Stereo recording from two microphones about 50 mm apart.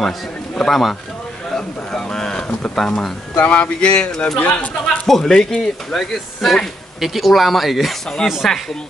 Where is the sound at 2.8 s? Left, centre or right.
Centre.